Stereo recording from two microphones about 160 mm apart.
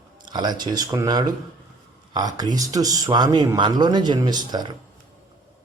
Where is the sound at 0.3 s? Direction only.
25° right (ahead or behind).